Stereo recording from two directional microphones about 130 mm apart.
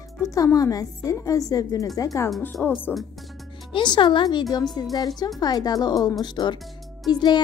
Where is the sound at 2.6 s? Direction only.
Centre (ahead or behind).